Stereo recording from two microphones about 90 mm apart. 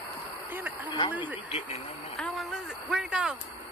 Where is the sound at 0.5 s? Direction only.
20° right (ahead or behind).